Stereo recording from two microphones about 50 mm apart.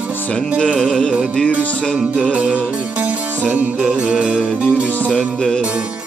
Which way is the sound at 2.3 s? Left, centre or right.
Right.